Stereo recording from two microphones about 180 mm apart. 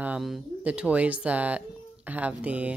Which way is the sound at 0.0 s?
5° right (ahead or behind).